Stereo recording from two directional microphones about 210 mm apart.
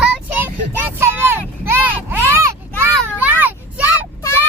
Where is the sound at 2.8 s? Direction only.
10° right (ahead or behind).